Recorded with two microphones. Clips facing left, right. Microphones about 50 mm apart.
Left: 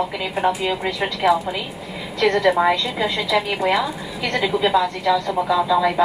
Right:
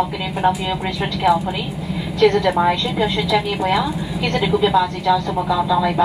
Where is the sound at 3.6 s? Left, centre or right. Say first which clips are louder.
Right 1 dB; left.